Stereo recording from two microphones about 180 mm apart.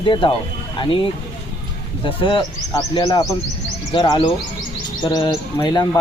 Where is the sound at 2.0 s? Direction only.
30° left (ahead or behind).